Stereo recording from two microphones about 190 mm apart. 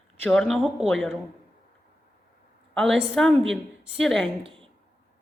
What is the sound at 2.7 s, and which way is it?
A man's voice, centre (ahead or behind).